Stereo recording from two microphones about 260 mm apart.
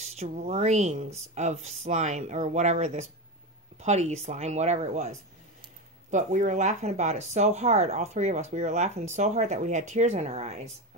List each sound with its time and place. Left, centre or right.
0.0 s speech: right